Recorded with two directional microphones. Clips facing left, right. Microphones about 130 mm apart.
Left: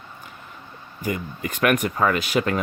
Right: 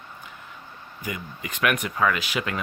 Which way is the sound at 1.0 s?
45° left (ahead or behind).